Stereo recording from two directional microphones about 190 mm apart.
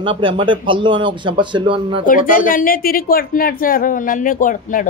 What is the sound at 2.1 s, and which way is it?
A woman's voice, 45° left (ahead or behind).